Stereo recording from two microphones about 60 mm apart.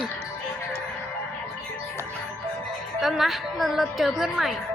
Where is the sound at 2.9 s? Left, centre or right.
Centre.